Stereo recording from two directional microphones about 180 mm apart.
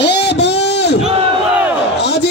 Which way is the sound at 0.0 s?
70° left (ahead or behind).